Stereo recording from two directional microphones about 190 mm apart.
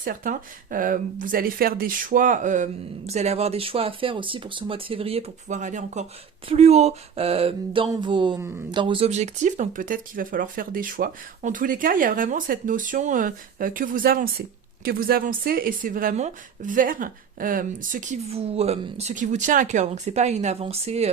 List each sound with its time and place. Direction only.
0.0 s a woman's voice: 45° right (ahead or behind)